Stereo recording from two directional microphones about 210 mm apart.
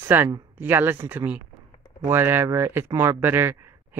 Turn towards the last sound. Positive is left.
turn(degrees=-10)  # may be behind; listen again after turning